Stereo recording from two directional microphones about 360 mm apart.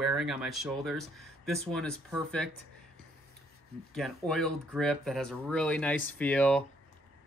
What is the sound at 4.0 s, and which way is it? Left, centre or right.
Speech, centre.